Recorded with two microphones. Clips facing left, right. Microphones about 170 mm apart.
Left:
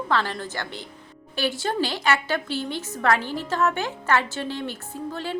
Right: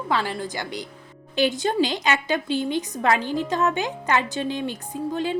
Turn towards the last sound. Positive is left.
turn(degrees=-15)  # may be behind; listen again after turning